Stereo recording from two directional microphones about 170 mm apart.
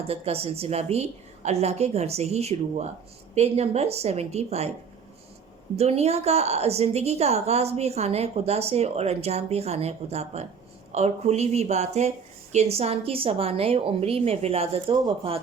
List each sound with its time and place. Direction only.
0.1 s a woman's voice: 35° right (ahead or behind)
5.7 s a woman's voice: 35° right (ahead or behind)